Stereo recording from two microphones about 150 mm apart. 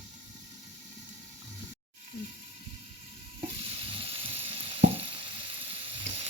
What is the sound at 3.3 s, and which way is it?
Frying, 35° right (ahead or behind).